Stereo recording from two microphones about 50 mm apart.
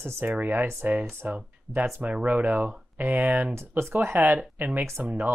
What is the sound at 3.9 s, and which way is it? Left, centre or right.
Speech, right.